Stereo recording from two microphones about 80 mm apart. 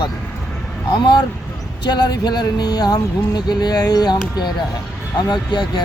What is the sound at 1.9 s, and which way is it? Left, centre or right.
Speech, left.